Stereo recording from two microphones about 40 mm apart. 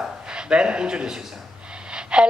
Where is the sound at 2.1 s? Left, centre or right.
Right.